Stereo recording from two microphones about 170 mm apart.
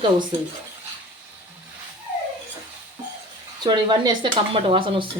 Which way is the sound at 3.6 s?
25° right (ahead or behind).